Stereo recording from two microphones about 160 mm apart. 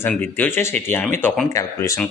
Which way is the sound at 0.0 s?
10° left (ahead or behind).